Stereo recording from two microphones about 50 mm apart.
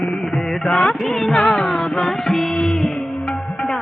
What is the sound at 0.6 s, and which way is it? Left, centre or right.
Speech, centre.